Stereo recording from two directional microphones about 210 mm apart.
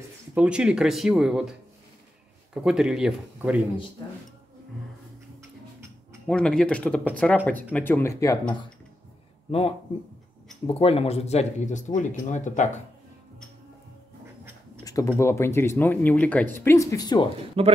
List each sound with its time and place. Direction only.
0.3 s speech: 5° right (ahead or behind)
6.2 s speech: 5° left (ahead or behind); by 12.8 s 35° left (ahead or behind)
14.9 s speech: 15° left (ahead or behind)
17.6 s a man's voice: 25° right (ahead or behind)